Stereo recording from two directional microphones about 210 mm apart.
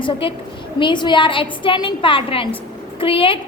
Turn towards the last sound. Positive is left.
turn(degrees=25)  # may be behind; listen again after turning